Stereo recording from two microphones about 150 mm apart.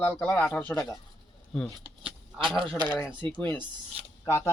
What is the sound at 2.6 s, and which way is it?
Speech, 35° right (ahead or behind).